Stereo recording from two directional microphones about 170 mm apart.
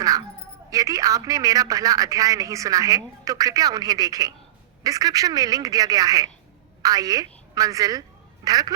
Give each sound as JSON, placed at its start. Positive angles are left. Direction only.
{"t": 0.7, "sound": "a man's voice", "side_deg": -20}